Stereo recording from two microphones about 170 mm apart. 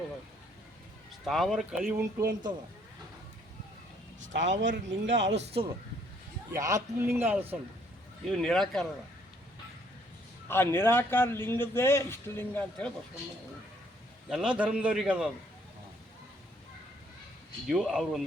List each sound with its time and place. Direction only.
1.2 s speech: centre (ahead or behind)
4.2 s speech: 45° right (ahead or behind)
4.7 s speech: 90° right
6.5 s a man's voice: 20° right (ahead or behind)
8.3 s speech: centre (ahead or behind)
10.5 s a man's voice: 15° left (ahead or behind)
14.3 s a man's voice: 5° right (ahead or behind)
17.7 s speech: centre (ahead or behind)